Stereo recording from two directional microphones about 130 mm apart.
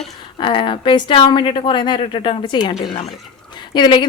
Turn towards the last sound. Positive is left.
turn(degrees=35)  # may be behind; listen again after turning